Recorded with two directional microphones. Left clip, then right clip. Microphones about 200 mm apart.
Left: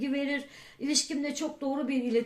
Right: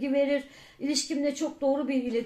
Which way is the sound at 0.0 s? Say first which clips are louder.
Right 6 dB; 35° left (ahead or behind).